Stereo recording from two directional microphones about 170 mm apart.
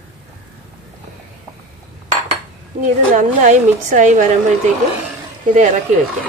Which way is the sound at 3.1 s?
45° right (ahead or behind).